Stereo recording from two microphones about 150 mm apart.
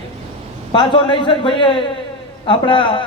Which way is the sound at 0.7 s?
30° left (ahead or behind).